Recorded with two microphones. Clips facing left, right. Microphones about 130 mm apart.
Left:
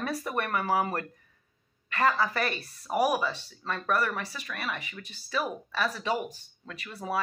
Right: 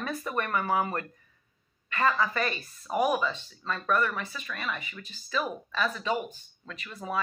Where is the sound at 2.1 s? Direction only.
40° left (ahead or behind).